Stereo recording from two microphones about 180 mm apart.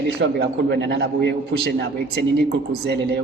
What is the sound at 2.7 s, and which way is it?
Speech, 65° right (ahead or behind).